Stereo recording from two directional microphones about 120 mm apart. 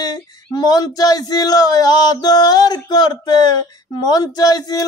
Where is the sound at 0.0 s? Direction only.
35° left (ahead or behind).